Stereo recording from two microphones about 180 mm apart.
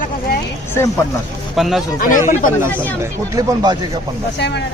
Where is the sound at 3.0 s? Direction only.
20° right (ahead or behind).